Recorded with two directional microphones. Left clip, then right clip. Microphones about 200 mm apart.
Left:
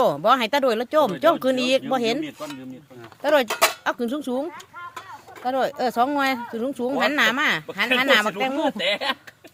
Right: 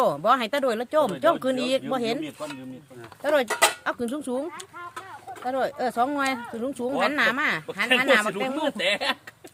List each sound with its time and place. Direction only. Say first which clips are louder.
0.0 s speech: left 3 dB; 40° left (ahead or behind)
3.5 s speech: left 1 dB; 20° left (ahead or behind)
3.8 s speech: left 3 dB; 35° left (ahead or behind)
5.5 s speech: left 3 dB; 40° left (ahead or behind)
8.8 s speech: left 1 dB; 25° right (ahead or behind)